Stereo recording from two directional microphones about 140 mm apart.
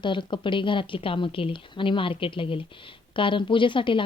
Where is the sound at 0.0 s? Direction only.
35° left (ahead or behind).